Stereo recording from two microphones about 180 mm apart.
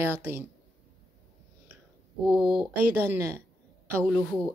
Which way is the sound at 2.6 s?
10° right (ahead or behind).